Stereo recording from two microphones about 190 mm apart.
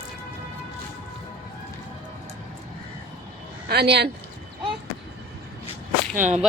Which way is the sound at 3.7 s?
60° right (ahead or behind).